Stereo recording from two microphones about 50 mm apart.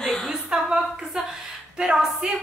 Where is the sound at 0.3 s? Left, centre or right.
Centre.